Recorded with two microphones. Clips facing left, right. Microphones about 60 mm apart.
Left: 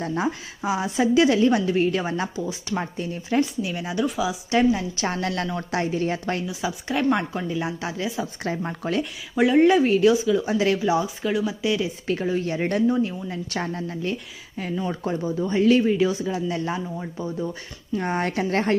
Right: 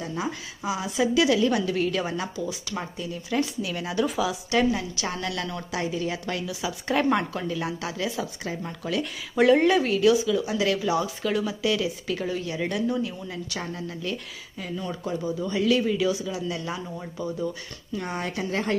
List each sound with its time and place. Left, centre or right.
0.0 s a woman's voice: left; by 4.0 s centre
4.0 s a woman's voice: centre
4.5 s speech: left
5.0 s a woman's voice: left
7.1 s speech: centre
8.4 s a woman's voice: left
9.3 s speech: centre
9.6 s speech: left
12.0 s a woman's voice: left
15.2 s a woman's voice: left
17.0 s speech: left
17.9 s a woman's voice: left